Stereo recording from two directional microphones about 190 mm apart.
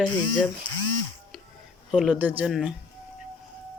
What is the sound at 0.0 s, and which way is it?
Speech, 10° left (ahead or behind).